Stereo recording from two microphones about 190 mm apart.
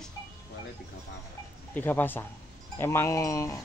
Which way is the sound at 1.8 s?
10° left (ahead or behind).